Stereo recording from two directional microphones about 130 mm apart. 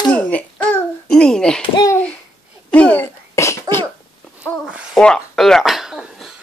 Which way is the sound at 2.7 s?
10° left (ahead or behind).